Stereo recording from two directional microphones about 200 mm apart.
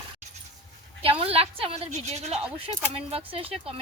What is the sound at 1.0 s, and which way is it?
A woman's voice, 30° right (ahead or behind).